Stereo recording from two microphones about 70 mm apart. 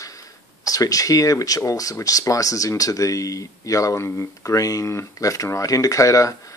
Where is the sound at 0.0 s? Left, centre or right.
Left.